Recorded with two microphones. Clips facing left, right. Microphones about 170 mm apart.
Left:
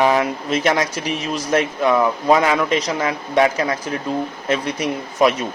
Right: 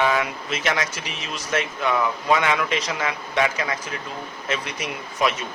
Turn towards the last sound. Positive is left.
turn(degrees=40)  # may be behind; listen again after turning